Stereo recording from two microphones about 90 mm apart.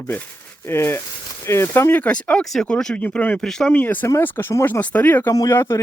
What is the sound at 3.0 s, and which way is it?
Speech, 20° left (ahead or behind).